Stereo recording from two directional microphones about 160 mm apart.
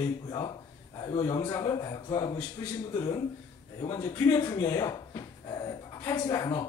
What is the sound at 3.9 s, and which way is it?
Speech, 25° left (ahead or behind).